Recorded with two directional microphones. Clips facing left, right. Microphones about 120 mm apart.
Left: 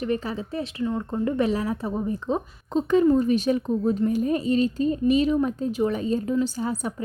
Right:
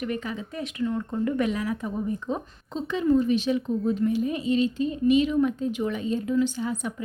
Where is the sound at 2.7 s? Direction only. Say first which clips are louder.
Left 4 dB; 50° left (ahead or behind).